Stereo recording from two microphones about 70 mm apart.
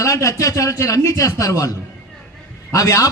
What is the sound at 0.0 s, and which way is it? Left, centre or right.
A man's voice, left.